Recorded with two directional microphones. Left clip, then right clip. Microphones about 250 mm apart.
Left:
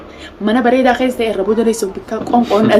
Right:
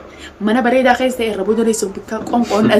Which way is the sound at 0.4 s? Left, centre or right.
Centre.